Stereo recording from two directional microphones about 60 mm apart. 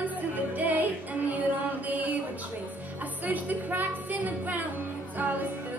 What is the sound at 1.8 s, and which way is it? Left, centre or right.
Music, right.